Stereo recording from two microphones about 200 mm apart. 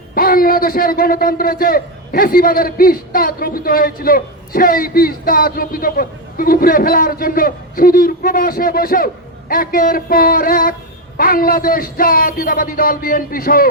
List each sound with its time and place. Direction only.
0.1 s a man's voice: 45° left (ahead or behind)